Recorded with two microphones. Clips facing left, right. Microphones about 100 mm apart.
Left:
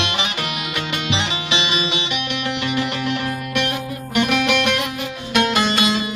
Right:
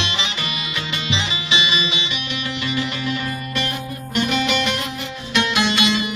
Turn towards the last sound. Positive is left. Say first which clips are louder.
# even
turn(degrees=45)  # may be behind; listen again after turning